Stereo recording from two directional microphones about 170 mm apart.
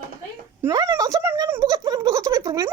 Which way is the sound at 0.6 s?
15° right (ahead or behind).